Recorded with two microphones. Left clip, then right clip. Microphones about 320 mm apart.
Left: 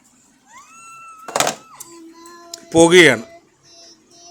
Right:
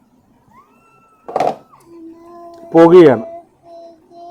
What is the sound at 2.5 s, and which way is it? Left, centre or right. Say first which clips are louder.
Speech: right 4 dB; left.